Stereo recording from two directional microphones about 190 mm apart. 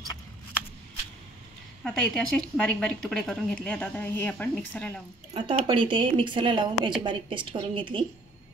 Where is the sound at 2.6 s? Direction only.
5° left (ahead or behind).